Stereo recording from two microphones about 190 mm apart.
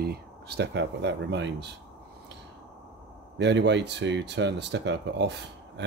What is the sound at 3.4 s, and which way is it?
Speech, 65° right (ahead or behind).